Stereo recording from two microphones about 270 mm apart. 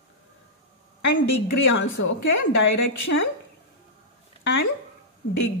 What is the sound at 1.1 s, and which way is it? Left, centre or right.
A woman's voice, left.